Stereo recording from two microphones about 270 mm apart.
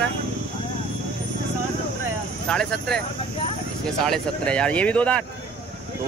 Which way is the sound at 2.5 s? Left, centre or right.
Centre.